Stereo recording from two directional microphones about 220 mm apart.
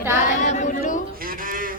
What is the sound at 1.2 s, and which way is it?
Speech, 40° right (ahead or behind).